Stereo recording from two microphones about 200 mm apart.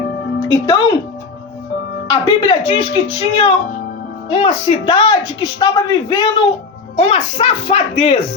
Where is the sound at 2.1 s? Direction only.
25° left (ahead or behind).